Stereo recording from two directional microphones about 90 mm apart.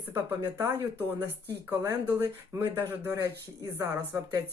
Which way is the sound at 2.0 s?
25° right (ahead or behind).